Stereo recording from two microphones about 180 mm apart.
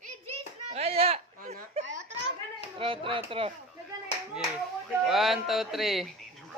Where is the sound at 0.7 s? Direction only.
35° right (ahead or behind).